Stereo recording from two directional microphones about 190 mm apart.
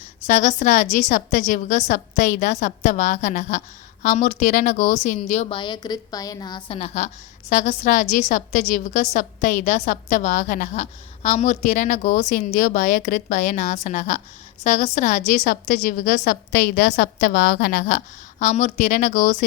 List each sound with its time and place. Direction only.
0.3 s a woman's voice: 40° left (ahead or behind); by 6.7 s 20° left (ahead or behind)
6.7 s a woman's voice: 35° left (ahead or behind)